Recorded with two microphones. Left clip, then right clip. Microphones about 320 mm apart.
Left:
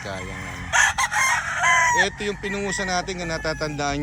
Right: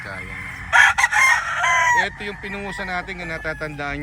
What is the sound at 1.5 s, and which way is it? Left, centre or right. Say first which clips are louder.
Chicken: right 1 dB; right.